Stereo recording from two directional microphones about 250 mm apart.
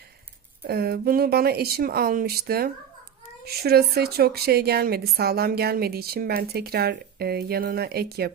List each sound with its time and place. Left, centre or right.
0.7 s a woman's voice: right